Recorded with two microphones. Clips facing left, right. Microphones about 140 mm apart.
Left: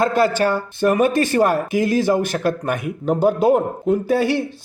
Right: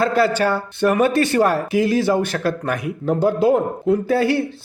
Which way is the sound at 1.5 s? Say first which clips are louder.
Even; 45° left (ahead or behind).